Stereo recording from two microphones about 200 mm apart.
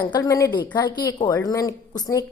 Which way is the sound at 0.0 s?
15° left (ahead or behind).